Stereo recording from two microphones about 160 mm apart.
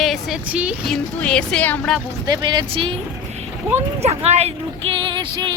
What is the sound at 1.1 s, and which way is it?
Speech, 5° left (ahead or behind).